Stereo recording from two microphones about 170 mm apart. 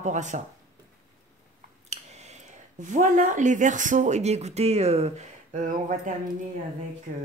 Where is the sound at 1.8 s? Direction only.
40° right (ahead or behind).